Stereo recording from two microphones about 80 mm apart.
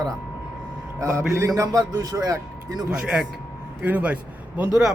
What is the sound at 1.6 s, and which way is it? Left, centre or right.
Speech, right.